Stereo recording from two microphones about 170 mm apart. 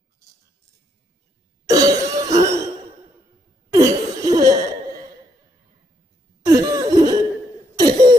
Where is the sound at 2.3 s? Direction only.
15° right (ahead or behind).